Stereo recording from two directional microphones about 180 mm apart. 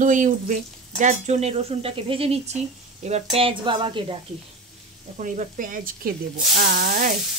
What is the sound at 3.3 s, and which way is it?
Speech, 30° right (ahead or behind).